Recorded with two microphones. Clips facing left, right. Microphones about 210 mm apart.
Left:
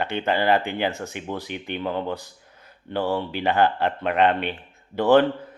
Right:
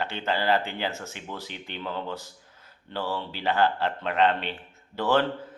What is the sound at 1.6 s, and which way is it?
Speech, 55° left (ahead or behind).